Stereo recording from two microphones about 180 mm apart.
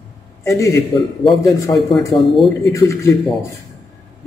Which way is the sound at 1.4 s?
Centre (ahead or behind).